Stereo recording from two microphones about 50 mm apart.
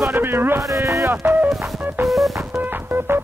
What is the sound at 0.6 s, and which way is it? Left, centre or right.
Speech, right.